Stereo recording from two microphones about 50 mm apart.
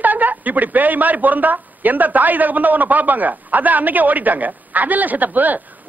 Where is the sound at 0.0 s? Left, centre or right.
Right.